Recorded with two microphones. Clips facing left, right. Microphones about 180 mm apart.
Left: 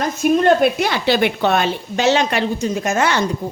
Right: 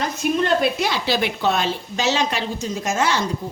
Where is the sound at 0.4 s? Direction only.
55° left (ahead or behind).